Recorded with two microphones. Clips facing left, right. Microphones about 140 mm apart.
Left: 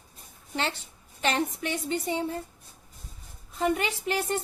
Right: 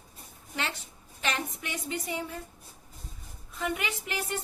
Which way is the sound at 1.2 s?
35° left (ahead or behind).